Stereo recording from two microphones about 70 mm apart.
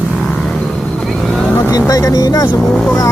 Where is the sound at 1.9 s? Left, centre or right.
Left.